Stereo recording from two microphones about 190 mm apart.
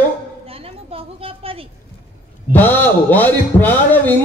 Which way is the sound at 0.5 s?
30° right (ahead or behind).